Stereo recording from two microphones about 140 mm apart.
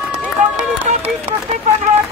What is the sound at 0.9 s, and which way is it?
Speech, 60° right (ahead or behind).